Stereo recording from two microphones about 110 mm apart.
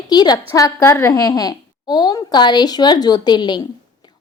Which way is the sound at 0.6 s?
25° left (ahead or behind).